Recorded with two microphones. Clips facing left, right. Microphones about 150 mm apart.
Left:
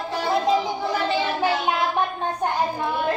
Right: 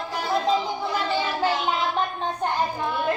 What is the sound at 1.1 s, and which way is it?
Child singing, 15° left (ahead or behind).